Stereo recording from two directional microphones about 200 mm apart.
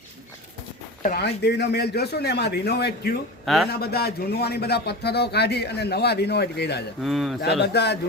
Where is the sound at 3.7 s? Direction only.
50° left (ahead or behind).